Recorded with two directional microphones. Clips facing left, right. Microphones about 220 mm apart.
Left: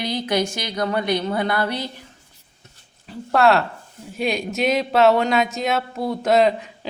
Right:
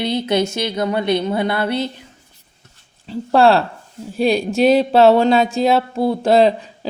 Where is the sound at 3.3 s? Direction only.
30° right (ahead or behind).